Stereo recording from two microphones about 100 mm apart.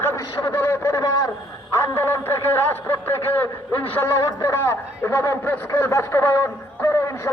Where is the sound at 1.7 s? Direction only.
25° left (ahead or behind).